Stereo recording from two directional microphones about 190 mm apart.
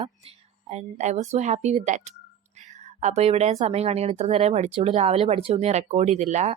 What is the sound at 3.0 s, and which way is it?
Speech, 35° right (ahead or behind).